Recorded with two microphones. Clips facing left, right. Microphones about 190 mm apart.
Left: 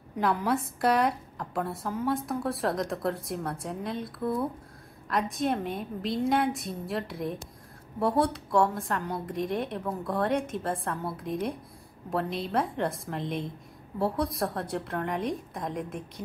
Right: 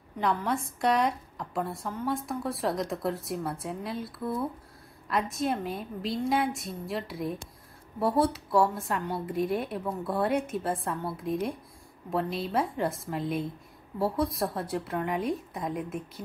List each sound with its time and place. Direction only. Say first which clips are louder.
0.2 s speech: left 2 dB; 5° left (ahead or behind)